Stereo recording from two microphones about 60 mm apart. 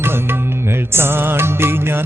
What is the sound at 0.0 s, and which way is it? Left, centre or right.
Music, right.